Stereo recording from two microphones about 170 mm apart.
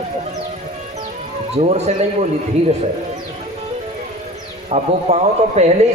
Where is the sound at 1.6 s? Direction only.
40° right (ahead or behind).